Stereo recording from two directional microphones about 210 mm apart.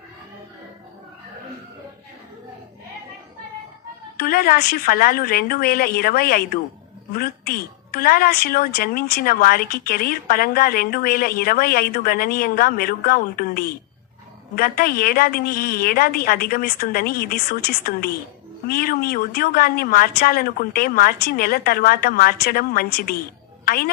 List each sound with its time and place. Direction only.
4.2 s speech: 45° left (ahead or behind)